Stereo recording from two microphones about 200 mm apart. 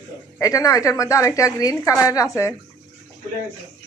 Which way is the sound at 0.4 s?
15° left (ahead or behind).